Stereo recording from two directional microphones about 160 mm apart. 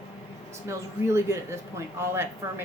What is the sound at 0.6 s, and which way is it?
Speech, 15° right (ahead or behind).